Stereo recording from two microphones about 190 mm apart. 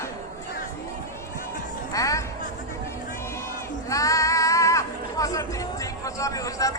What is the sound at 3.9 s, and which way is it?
Speech, 15° left (ahead or behind).